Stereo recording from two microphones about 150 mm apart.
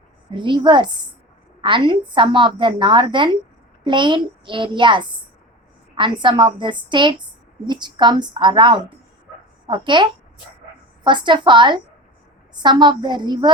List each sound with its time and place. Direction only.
0.3 s a woman's voice: 30° right (ahead or behind)